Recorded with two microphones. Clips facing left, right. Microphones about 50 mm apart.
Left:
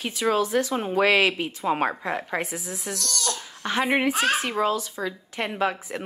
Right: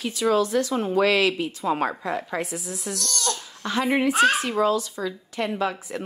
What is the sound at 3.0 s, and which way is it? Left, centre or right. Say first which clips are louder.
Crying: right 2 dB; right.